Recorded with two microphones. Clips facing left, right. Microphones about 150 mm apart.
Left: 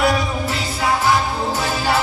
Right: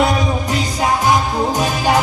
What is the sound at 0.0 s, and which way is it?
Music, 20° right (ahead or behind).